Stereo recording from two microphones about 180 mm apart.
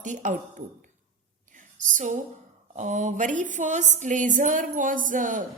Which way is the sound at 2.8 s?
40° right (ahead or behind).